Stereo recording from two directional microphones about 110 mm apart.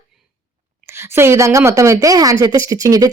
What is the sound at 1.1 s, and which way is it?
Speech, 25° right (ahead or behind).